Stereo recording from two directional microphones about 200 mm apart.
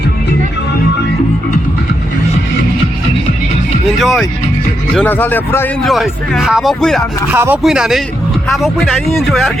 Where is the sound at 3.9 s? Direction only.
Centre (ahead or behind).